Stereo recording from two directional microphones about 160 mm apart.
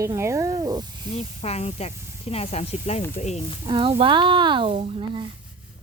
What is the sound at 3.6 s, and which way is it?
Speech, 30° right (ahead or behind).